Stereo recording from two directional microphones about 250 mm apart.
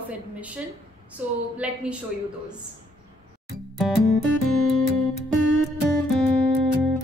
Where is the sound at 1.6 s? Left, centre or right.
Centre.